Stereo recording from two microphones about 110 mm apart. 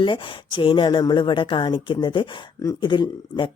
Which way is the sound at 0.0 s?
50° left (ahead or behind).